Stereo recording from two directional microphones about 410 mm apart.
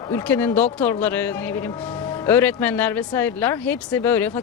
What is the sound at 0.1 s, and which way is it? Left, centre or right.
Speech, centre.